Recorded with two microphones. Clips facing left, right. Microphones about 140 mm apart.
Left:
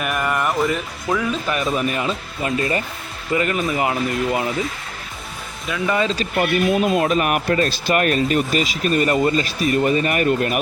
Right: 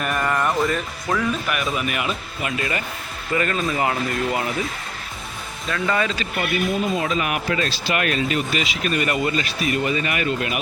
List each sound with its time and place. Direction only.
0.0 s music: 5° left (ahead or behind)
0.6 s speech: centre (ahead or behind)
1.3 s speech: 30° left (ahead or behind)
5.7 s speech: 20° left (ahead or behind)
6.9 s speech: 50° left (ahead or behind)